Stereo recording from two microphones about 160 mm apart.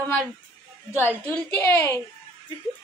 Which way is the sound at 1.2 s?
15° left (ahead or behind).